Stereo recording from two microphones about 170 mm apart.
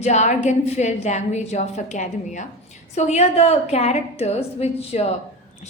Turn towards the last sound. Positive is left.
turn(degrees=40)  # may be behind; listen again after turning